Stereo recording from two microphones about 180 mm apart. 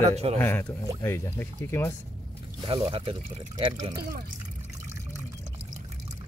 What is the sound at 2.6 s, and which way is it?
Speech, 25° right (ahead or behind).